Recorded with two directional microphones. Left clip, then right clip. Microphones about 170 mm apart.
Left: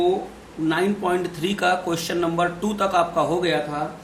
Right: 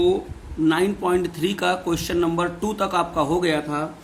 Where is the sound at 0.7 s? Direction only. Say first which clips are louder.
Right 1 dB; 45° right (ahead or behind).